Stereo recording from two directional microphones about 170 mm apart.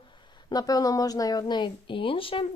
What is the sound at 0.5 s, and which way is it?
A woman's voice, 20° left (ahead or behind).